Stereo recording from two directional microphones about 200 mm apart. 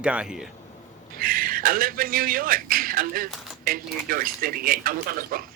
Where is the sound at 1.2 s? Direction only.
45° right (ahead or behind).